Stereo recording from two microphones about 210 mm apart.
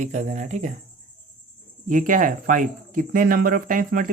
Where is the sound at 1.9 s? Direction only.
40° right (ahead or behind).